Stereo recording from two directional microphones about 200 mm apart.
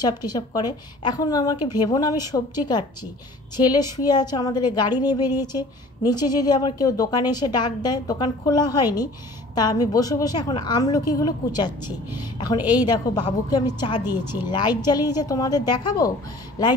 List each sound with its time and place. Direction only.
0.0 s a woman's voice: 20° left (ahead or behind)
14.0 s speech: 10° right (ahead or behind)
14.5 s a woman's voice: 20° left (ahead or behind)